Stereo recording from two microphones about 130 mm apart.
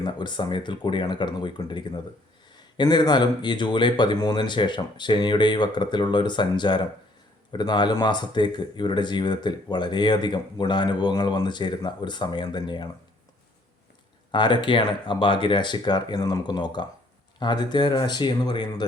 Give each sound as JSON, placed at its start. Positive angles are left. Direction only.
{"t": 0.0, "sound": "speech", "side_deg": 35}
{"t": 14.3, "sound": "speech", "side_deg": 35}